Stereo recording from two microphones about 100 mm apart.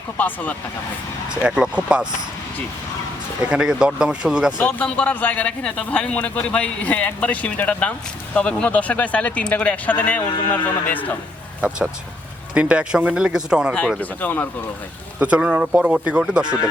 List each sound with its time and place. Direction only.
0.2 s speech: 15° left (ahead or behind)
1.3 s speech: 10° right (ahead or behind)
3.5 s speech: 5° right (ahead or behind)
4.5 s speech: 15° left (ahead or behind)
12.5 s speech: 10° right (ahead or behind)
14.0 s speech: 15° left (ahead or behind)
15.2 s speech: 10° right (ahead or behind)